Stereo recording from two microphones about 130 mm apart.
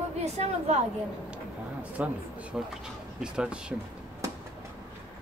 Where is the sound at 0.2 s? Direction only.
60° right (ahead or behind).